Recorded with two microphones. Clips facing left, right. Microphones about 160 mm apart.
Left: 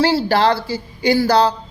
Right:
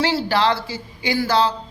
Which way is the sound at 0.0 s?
35° left (ahead or behind).